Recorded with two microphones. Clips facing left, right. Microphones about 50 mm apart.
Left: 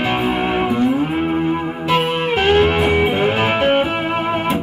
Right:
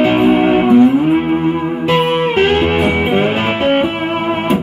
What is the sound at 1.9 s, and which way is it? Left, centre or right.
Music, right.